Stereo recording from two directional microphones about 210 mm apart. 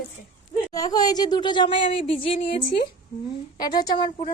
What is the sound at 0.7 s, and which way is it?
A woman's voice, 20° left (ahead or behind).